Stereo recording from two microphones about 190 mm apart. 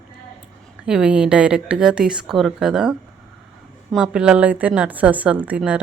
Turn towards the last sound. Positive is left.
turn(degrees=-5)  # may be behind; listen again after turning